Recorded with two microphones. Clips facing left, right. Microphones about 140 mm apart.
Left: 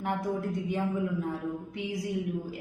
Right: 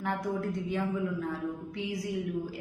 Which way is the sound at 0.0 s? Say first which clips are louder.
Left 1 dB; 20° left (ahead or behind).